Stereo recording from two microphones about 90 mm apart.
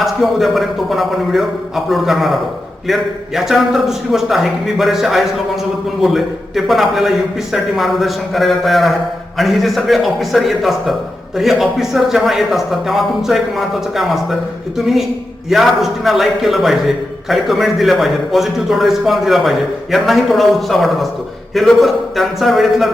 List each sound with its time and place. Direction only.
0.0 s a man's voice: centre (ahead or behind)
15.4 s a man's voice: centre (ahead or behind)